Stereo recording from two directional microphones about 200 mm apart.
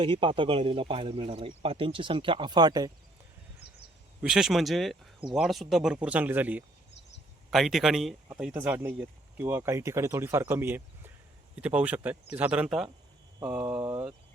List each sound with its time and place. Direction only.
0.0 s speech: 25° right (ahead or behind)
4.2 s speech: 5° right (ahead or behind)